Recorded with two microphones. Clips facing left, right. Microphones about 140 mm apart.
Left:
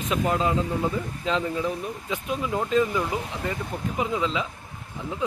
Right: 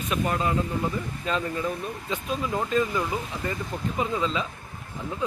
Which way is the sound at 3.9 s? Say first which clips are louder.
Left 1 dB; 15° left (ahead or behind).